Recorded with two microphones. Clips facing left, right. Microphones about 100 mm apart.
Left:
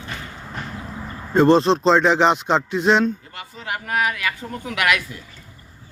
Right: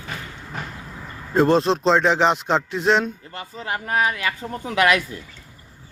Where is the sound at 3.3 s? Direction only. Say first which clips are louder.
Right 1 dB; 30° right (ahead or behind).